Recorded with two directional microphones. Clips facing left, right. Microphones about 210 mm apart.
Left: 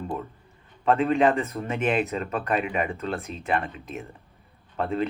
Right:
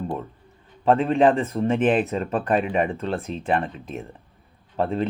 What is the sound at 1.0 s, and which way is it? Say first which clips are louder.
Speech: right 1 dB; 30° right (ahead or behind).